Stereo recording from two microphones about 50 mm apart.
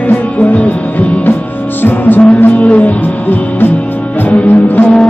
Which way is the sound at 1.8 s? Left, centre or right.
Left.